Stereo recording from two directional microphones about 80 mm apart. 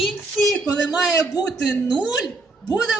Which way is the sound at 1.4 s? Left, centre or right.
Centre.